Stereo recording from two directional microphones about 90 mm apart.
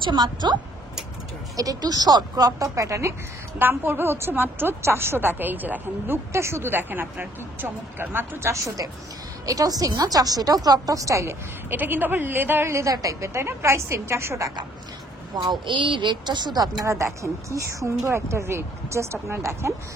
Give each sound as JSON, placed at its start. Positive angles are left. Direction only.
{"t": 0.0, "sound": "a woman's voice", "side_deg": -55}
{"t": 1.6, "sound": "a woman's voice", "side_deg": -45}
{"t": 11.7, "sound": "speech", "side_deg": -20}
{"t": 15.6, "sound": "a woman's voice", "side_deg": -65}
{"t": 16.8, "sound": "speech", "side_deg": -35}